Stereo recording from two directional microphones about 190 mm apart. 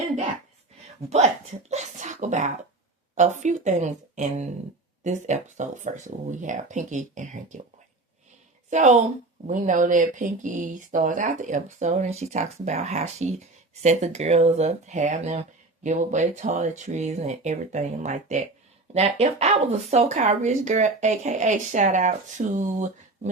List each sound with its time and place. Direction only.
1.7 s speech: 40° right (ahead or behind)
8.7 s speech: 40° right (ahead or behind)